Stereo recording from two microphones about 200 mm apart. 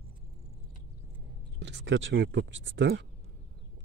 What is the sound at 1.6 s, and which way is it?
Speech, 60° right (ahead or behind).